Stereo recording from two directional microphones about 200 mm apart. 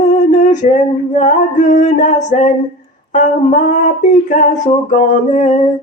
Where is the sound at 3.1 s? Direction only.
40° left (ahead or behind).